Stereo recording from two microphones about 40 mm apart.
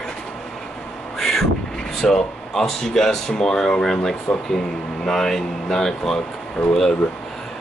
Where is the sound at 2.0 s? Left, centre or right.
Centre.